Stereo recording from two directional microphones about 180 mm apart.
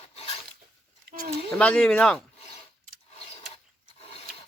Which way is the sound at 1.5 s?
5° left (ahead or behind).